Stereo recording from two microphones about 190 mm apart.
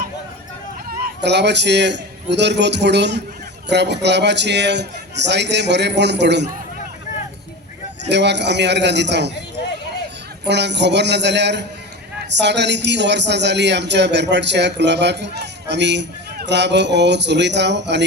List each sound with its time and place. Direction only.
0.9 s a man's voice: 50° right (ahead or behind)
8.1 s a man's voice: 65° right (ahead or behind)
10.4 s a man's voice: 65° right (ahead or behind)